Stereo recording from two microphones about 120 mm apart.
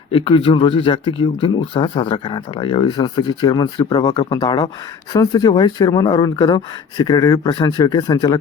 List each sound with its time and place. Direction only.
0.1 s speech: 50° left (ahead or behind)